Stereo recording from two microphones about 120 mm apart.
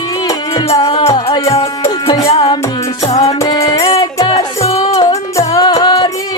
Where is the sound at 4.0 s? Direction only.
35° left (ahead or behind).